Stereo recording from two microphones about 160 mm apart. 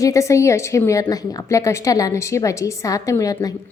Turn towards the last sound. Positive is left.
turn(degrees=20)  # may be behind; listen again after turning